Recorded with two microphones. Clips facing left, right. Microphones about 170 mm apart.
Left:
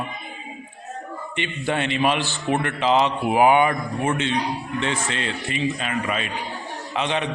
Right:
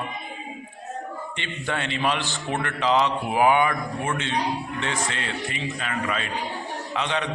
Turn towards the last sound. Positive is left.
turn(degrees=20)  # may be behind; listen again after turning